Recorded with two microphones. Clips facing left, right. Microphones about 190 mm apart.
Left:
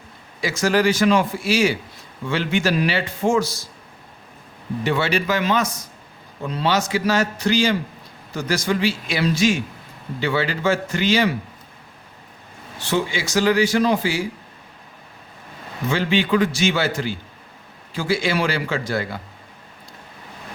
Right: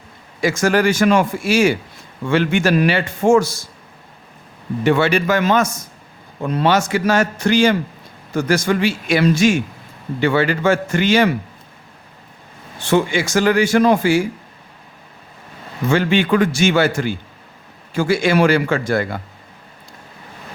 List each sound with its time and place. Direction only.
0.4 s a man's voice: 50° right (ahead or behind)
4.8 s a man's voice: 55° right (ahead or behind)
12.8 s a man's voice: 55° right (ahead or behind)
15.9 s a man's voice: 50° right (ahead or behind)